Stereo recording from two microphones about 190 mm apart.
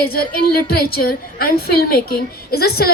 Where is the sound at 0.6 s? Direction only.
55° left (ahead or behind).